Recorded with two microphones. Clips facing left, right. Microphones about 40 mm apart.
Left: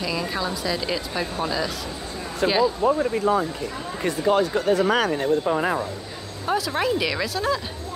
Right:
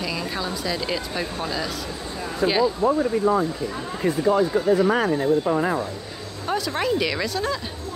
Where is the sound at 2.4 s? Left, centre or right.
Left.